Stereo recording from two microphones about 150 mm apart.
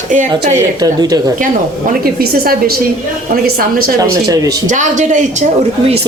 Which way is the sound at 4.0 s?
25° right (ahead or behind).